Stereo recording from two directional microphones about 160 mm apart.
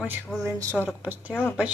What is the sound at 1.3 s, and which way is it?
Speech, 10° left (ahead or behind).